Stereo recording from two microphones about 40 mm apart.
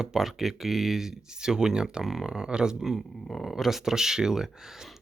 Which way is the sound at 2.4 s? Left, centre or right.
Centre.